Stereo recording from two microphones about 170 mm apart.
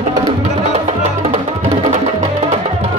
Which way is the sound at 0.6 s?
40° right (ahead or behind).